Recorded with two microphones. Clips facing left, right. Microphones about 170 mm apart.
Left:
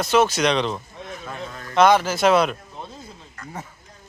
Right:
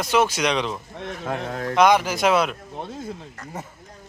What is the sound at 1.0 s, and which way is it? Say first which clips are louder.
Speech: right 5 dB; 70° right (ahead or behind).